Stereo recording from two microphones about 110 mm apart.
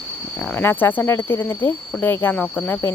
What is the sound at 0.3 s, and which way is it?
Speech, 15° left (ahead or behind).